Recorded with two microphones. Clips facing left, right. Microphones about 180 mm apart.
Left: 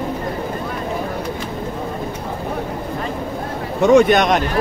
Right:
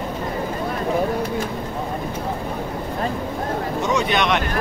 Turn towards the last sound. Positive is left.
turn(degrees=45)  # may be behind; listen again after turning